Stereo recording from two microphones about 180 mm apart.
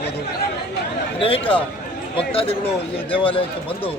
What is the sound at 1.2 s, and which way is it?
Speech, 30° left (ahead or behind).